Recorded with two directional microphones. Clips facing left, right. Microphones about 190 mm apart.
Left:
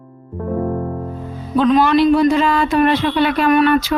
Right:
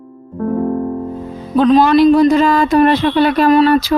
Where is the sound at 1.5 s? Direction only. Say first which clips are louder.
Right 3 dB; 40° right (ahead or behind).